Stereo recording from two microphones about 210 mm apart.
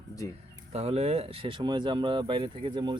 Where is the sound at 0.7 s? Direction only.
30° right (ahead or behind).